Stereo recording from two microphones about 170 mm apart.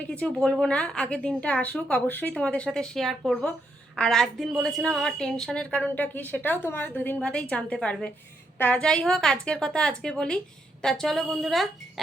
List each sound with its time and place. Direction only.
0.1 s a woman's voice: 5° left (ahead or behind)